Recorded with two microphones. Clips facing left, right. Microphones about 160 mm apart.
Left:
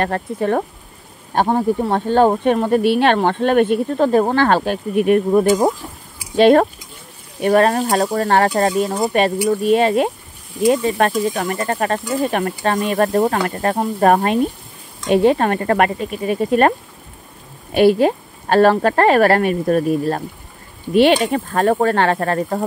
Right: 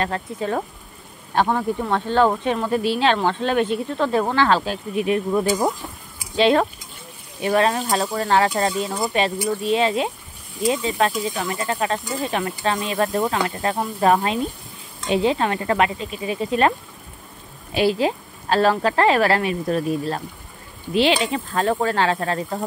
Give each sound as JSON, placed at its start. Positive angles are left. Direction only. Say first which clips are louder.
{"t": 0.0, "sound": "speech", "louder": "left 5 dB", "side_deg": 55}
{"t": 1.3, "sound": "speech", "louder": "left 4 dB", "side_deg": 40}
{"t": 17.7, "sound": "speech", "louder": "left 7 dB", "side_deg": 55}